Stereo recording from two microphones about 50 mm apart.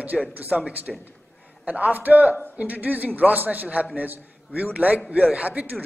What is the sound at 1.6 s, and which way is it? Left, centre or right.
A man's voice, right.